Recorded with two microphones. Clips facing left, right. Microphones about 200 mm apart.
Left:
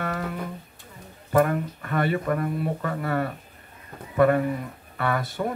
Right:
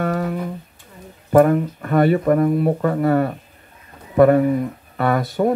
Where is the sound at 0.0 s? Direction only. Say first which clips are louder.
Right 8 dB; 45° right (ahead or behind).